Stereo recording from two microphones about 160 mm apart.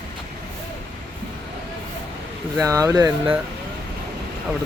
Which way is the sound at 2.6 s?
20° right (ahead or behind).